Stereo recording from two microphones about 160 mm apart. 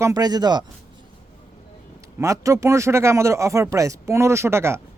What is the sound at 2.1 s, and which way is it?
Speech, 20° right (ahead or behind).